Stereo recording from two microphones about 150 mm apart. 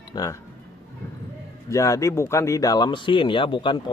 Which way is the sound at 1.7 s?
20° left (ahead or behind).